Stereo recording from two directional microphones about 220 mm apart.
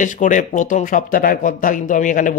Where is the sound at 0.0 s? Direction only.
35° left (ahead or behind).